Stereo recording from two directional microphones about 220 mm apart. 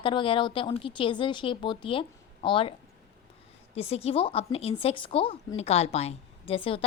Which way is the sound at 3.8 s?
25° left (ahead or behind).